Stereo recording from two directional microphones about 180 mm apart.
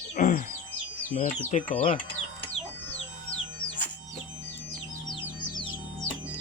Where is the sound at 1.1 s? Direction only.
40° left (ahead or behind).